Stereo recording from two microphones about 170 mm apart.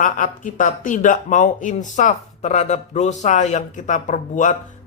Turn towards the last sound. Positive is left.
turn(degrees=50)  # may be behind; listen again after turning